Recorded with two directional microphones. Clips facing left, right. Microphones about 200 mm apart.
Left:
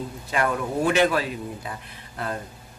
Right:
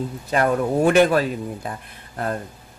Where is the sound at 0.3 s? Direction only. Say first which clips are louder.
Right 5 dB; 40° right (ahead or behind).